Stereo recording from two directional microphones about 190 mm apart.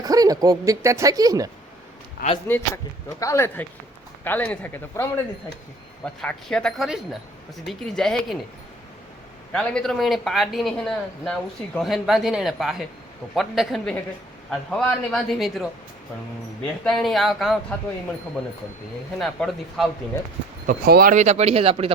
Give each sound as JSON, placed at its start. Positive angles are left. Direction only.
{"t": 0.0, "sound": "speech", "side_deg": -20}
{"t": 2.2, "sound": "a man's voice", "side_deg": 55}
{"t": 3.2, "sound": "a man's voice", "side_deg": 15}
{"t": 6.2, "sound": "speech", "side_deg": 5}
{"t": 9.5, "sound": "speech", "side_deg": 5}
{"t": 16.6, "sound": "speech", "side_deg": 5}
{"t": 19.2, "sound": "speech", "side_deg": 0}
{"t": 20.7, "sound": "speech", "side_deg": -50}